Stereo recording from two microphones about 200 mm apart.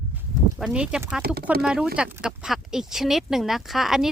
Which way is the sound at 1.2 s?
50° right (ahead or behind).